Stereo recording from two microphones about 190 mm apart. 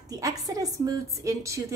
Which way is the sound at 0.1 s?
20° right (ahead or behind).